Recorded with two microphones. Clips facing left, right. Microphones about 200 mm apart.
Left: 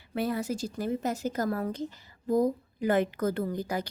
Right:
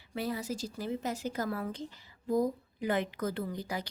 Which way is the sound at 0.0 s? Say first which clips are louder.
Left 5 dB; 55° left (ahead or behind).